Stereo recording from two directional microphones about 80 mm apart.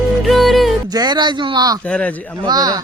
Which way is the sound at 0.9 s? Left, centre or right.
Right.